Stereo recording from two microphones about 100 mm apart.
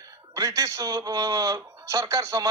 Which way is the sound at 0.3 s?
35° right (ahead or behind).